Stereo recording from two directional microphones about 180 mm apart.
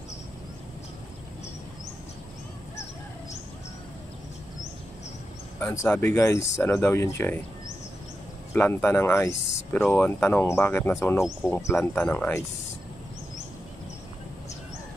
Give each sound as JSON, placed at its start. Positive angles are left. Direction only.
{"t": 5.6, "sound": "speech", "side_deg": 10}
{"t": 8.5, "sound": "speech", "side_deg": 10}